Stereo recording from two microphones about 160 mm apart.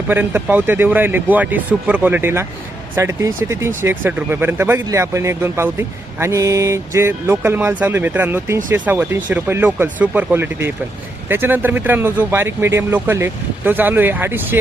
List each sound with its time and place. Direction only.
0.1 s speech: 10° right (ahead or behind)